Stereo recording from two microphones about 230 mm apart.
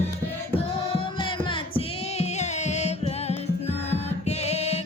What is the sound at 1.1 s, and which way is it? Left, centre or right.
Music, left.